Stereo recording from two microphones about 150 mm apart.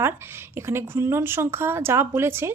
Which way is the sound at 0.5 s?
15° right (ahead or behind).